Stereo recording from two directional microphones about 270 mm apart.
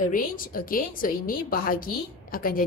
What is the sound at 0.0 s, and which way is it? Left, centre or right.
A woman's voice, left.